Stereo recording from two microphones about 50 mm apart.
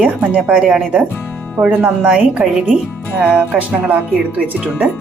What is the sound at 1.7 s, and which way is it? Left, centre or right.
Music, right.